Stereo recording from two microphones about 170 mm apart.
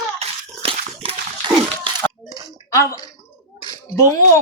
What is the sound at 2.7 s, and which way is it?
Speech, 20° left (ahead or behind).